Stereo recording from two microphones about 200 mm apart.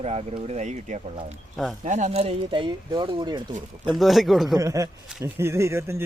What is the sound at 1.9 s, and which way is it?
Speech, 35° right (ahead or behind).